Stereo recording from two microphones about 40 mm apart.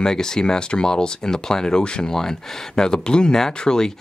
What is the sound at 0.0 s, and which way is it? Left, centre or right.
Speech, centre.